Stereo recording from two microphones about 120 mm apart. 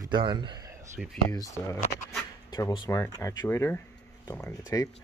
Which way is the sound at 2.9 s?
25° left (ahead or behind).